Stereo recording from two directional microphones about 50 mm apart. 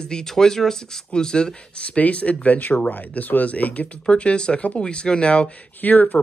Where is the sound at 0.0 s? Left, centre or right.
Centre.